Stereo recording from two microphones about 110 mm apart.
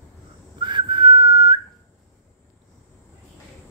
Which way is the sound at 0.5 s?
45° right (ahead or behind).